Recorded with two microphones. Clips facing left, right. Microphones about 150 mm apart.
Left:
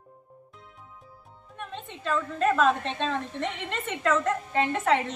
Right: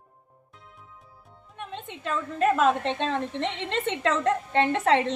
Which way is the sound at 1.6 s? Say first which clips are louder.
Right 1 dB; 15° right (ahead or behind).